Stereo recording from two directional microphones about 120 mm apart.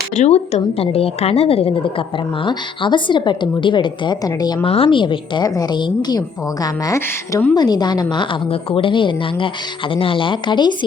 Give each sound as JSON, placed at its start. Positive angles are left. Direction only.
{"t": 0.2, "sound": "a woman's voice", "side_deg": 65}
{"t": 4.6, "sound": "a woman's voice", "side_deg": 50}
{"t": 7.5, "sound": "a woman's voice", "side_deg": 35}